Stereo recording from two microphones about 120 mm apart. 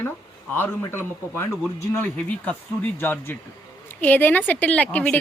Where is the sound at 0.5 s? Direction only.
20° left (ahead or behind).